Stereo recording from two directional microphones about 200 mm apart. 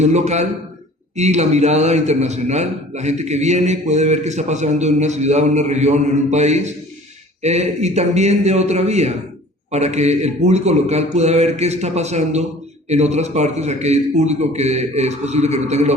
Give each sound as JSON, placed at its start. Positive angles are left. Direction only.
{"t": 0.0, "sound": "a man's voice", "side_deg": -35}